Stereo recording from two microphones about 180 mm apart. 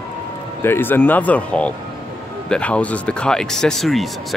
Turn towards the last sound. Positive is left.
turn(degrees=0)  # may be behind; listen again after turning